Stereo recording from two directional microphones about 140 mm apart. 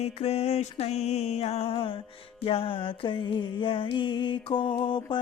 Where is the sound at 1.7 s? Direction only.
40° left (ahead or behind).